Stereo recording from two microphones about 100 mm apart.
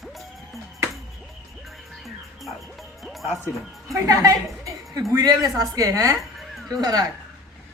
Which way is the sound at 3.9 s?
35° right (ahead or behind).